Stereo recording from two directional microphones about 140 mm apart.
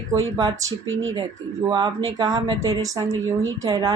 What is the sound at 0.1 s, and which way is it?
Speech, 25° right (ahead or behind).